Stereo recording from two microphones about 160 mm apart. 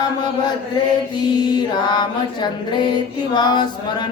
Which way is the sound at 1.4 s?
25° left (ahead or behind).